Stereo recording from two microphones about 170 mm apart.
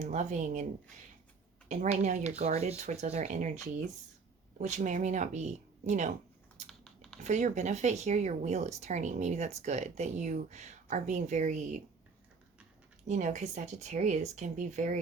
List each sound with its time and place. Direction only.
0.0 s speech: 45° right (ahead or behind)
6.7 s typing: 5° left (ahead or behind)
7.2 s speech: 45° right (ahead or behind)
13.1 s speech: 45° right (ahead or behind)